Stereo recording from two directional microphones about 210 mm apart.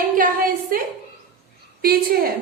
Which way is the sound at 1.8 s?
45° right (ahead or behind).